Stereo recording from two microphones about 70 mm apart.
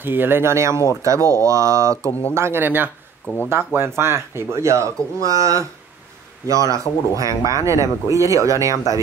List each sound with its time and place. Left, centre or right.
0.0 s speech: right
2.0 s speech: left
2.3 s speech: right